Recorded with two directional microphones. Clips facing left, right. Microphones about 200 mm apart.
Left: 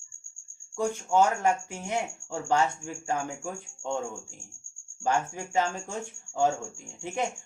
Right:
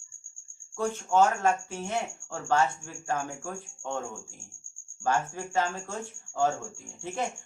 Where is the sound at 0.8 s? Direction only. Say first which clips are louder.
Even; 15° left (ahead or behind).